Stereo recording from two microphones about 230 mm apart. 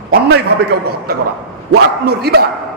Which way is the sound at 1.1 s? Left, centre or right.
Right.